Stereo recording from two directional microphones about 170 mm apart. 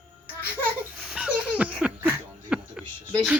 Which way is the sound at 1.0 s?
5° right (ahead or behind).